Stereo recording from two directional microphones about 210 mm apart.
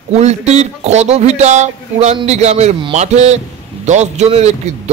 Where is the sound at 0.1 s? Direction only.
30° right (ahead or behind).